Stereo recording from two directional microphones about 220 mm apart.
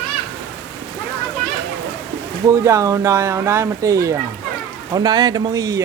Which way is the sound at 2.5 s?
15° right (ahead or behind).